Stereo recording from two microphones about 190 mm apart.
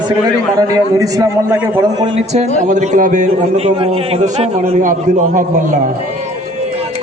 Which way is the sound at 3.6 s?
30° right (ahead or behind).